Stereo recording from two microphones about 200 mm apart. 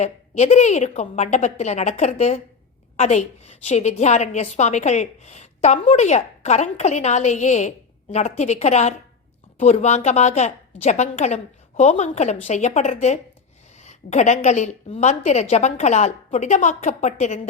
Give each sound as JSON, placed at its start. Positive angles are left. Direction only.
{"t": 0.0, "sound": "a woman's voice", "side_deg": 35}